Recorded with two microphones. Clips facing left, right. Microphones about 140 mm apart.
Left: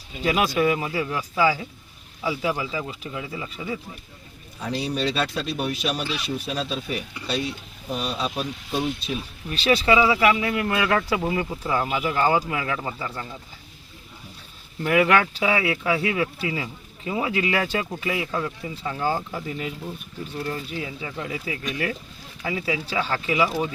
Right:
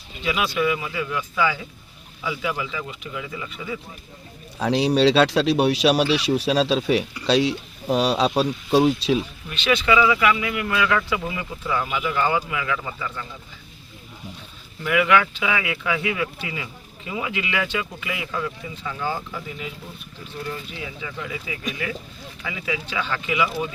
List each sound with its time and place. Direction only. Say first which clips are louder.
0.2 s speech: left 2 dB; 40° left (ahead or behind)
4.6 s speech: right 8 dB; 85° right
9.5 s speech: left 1 dB; 35° left (ahead or behind)
14.8 s speech: even; 40° left (ahead or behind)